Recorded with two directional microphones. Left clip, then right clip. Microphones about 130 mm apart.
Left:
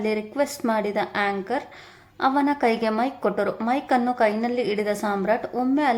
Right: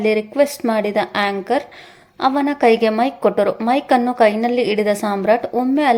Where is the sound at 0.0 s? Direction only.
20° right (ahead or behind).